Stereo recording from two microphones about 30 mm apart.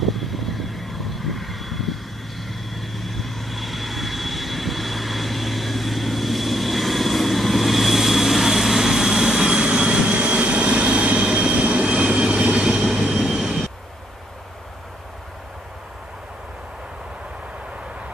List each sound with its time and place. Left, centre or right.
0.0 s vehicle: centre
9.5 s vehicle: right
10.2 s vehicle: right
12.0 s train: right
13.0 s train: centre
13.4 s vehicle: centre